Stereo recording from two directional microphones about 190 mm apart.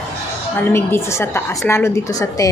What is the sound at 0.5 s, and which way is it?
A woman's voice, 10° left (ahead or behind).